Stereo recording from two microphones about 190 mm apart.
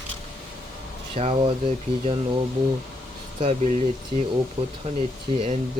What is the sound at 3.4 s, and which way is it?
Speech, 40° right (ahead or behind).